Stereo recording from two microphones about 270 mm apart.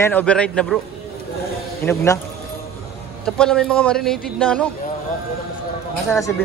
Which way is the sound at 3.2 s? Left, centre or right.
Centre.